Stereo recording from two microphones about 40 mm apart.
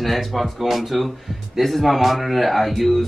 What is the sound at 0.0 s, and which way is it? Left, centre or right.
Speech, centre.